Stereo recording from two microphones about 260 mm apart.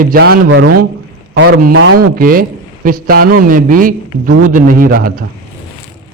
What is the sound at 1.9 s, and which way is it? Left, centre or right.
A man's voice, right.